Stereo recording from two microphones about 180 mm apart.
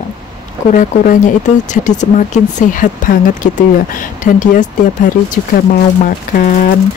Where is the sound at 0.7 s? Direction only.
45° left (ahead or behind).